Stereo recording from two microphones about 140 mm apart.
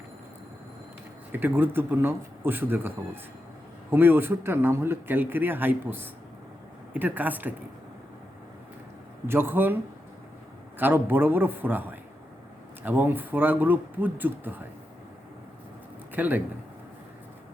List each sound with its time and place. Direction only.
1.3 s a man's voice: 15° right (ahead or behind)
3.9 s a man's voice: 15° right (ahead or behind)
9.2 s a man's voice: 15° right (ahead or behind)
10.8 s a man's voice: 15° right (ahead or behind)
16.1 s a man's voice: 10° right (ahead or behind)